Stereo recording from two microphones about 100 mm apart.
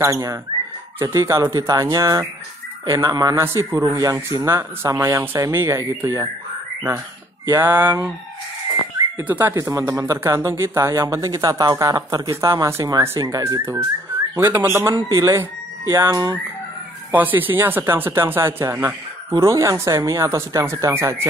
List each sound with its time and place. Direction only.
0.0 s speech: 35° right (ahead or behind)
3.3 s speech: 30° right (ahead or behind)
7.5 s speech: 20° right (ahead or behind)
9.3 s speech: 20° right (ahead or behind)
9.6 s speech: 35° right (ahead or behind)
17.1 s speech: 20° right (ahead or behind)